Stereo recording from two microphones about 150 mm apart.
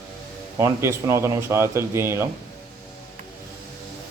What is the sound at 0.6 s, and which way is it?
Speech, 15° right (ahead or behind).